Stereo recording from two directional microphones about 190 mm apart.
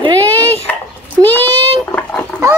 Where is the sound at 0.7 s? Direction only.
10° left (ahead or behind).